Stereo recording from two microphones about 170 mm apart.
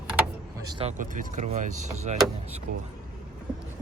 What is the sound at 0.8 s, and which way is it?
Speech, 45° right (ahead or behind).